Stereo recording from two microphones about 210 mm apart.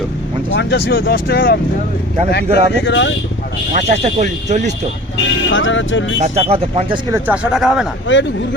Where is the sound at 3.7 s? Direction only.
30° right (ahead or behind).